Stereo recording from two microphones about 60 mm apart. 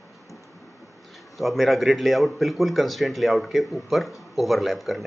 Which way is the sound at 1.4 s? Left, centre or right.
Centre.